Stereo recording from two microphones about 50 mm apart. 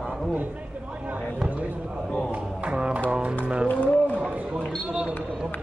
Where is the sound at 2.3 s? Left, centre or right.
Right.